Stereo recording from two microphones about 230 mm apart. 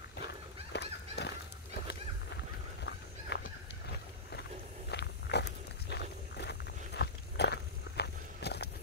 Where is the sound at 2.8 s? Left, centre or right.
Left.